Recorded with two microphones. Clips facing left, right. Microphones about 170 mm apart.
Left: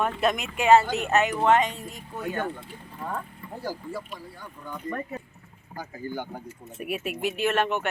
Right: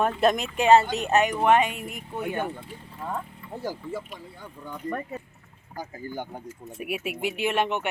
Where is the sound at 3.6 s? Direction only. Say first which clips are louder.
Right 1 dB; 20° right (ahead or behind).